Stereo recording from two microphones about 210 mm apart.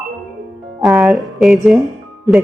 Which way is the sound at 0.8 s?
Centre (ahead or behind).